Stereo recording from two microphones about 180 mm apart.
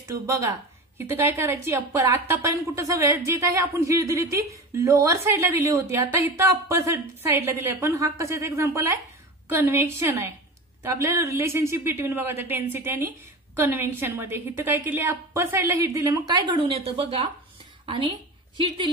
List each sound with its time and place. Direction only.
0.1 s a woman's voice: 15° right (ahead or behind)